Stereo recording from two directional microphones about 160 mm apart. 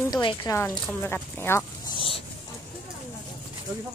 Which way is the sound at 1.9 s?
35° left (ahead or behind).